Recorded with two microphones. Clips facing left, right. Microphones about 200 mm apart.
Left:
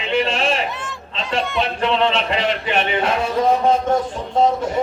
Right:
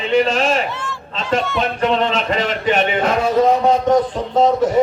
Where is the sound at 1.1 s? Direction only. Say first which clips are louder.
Right 3 dB; 45° right (ahead or behind).